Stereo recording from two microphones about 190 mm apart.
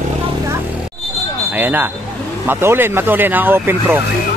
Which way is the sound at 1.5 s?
10° right (ahead or behind).